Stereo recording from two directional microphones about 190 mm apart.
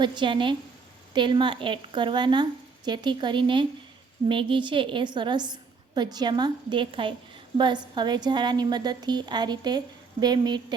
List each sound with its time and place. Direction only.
0.0 s a woman's voice: 25° right (ahead or behind)